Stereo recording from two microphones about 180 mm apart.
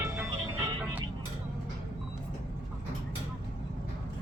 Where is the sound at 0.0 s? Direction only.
20° right (ahead or behind).